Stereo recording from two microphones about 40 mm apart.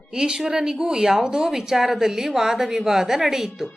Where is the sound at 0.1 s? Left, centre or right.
Centre.